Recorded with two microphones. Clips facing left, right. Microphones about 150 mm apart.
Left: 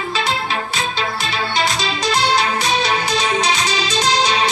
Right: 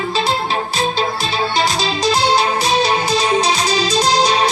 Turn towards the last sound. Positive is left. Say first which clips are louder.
# right 3 dB
turn(degrees=-35)  # may be behind; listen again after turning